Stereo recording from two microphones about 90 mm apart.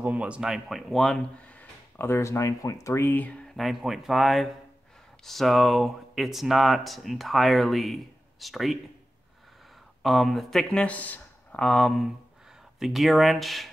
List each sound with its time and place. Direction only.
0.0 s speech: 15° right (ahead or behind); by 1.2 s 5° left (ahead or behind)
2.0 s speech: 30° left (ahead or behind)
3.2 s speech: 15° left (ahead or behind)
3.5 s speech: centre (ahead or behind)
10.0 s speech: centre (ahead or behind)